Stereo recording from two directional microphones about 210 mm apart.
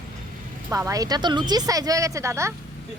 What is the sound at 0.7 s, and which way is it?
A woman's voice, 15° right (ahead or behind).